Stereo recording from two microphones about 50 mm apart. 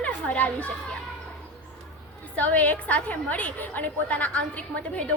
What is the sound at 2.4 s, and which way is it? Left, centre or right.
A woman's voice, left.